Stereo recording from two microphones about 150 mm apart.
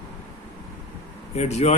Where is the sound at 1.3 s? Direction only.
45° left (ahead or behind).